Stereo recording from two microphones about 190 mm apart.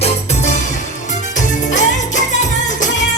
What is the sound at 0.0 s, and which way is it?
Music, 35° left (ahead or behind).